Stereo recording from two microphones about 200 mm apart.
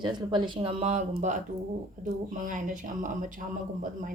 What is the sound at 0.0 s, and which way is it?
A woman's voice, 20° right (ahead or behind).